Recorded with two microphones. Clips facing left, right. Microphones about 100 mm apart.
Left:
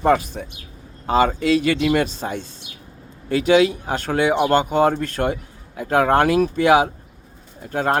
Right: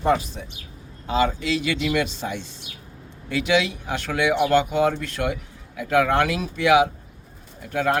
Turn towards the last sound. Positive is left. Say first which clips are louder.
# left 2 dB
turn(degrees=35)  # may be behind; listen again after turning